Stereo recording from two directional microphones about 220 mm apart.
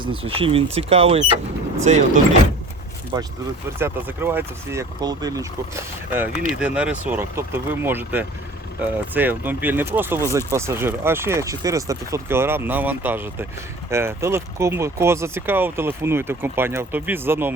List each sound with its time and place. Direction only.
0.0 s speech: 25° right (ahead or behind)
3.1 s speech: 20° right (ahead or behind)